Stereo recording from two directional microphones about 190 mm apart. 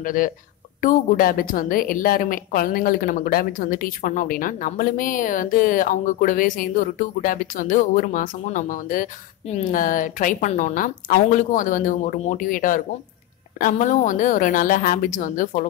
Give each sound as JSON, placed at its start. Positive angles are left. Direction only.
{"t": 0.0, "sound": "a woman's voice", "side_deg": 45}